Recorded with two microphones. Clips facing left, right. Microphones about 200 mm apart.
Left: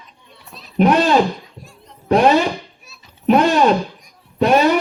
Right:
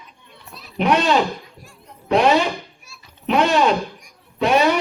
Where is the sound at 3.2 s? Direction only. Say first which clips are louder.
Left 4 dB; 45° left (ahead or behind).